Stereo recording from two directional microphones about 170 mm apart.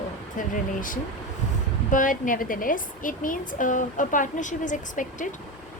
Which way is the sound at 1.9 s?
50° left (ahead or behind).